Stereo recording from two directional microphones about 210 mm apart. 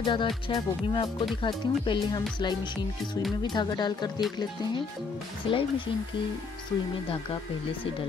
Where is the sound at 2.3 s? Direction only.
20° left (ahead or behind).